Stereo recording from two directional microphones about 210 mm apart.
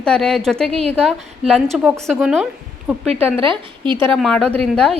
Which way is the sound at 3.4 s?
25° right (ahead or behind).